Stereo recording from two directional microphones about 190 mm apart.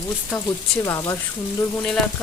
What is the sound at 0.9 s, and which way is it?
Speech, 15° left (ahead or behind).